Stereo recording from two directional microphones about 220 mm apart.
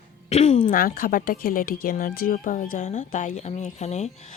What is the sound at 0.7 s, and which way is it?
A woman's voice, 40° left (ahead or behind).